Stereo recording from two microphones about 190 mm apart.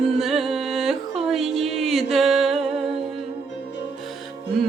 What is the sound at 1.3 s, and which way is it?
Music, centre (ahead or behind).